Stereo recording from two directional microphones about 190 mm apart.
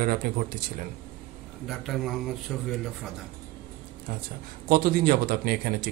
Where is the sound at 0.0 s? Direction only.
50° right (ahead or behind).